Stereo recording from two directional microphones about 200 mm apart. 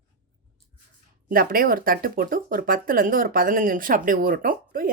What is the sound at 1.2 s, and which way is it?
Speech, 45° right (ahead or behind).